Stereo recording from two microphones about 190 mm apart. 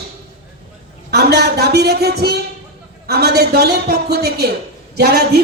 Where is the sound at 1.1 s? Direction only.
55° right (ahead or behind).